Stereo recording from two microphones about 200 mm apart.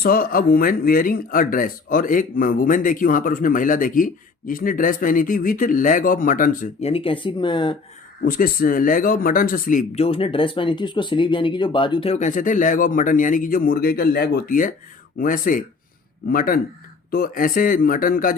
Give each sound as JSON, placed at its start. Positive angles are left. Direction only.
{"t": 0.0, "sound": "speech", "side_deg": 45}
{"t": 8.2, "sound": "speech", "side_deg": 45}